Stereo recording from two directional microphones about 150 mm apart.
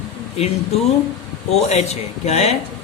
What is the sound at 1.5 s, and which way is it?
A man's voice, 45° left (ahead or behind).